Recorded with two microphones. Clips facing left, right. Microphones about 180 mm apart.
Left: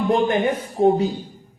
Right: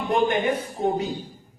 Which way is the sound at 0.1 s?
35° left (ahead or behind).